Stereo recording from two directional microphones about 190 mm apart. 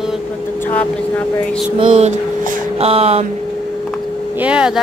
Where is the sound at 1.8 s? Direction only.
35° right (ahead or behind).